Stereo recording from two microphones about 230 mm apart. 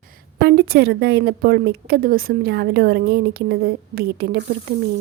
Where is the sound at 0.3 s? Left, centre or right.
Right.